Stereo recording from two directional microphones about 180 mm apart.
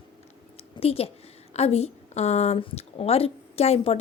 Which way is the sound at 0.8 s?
35° left (ahead or behind).